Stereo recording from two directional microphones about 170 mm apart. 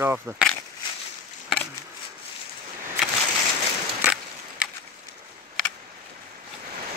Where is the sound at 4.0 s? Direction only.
5° right (ahead or behind).